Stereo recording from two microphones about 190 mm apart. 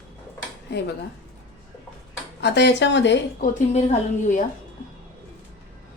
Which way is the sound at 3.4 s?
35° left (ahead or behind).